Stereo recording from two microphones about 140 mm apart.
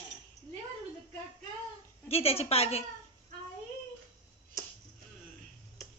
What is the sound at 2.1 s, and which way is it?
Speech, 45° left (ahead or behind).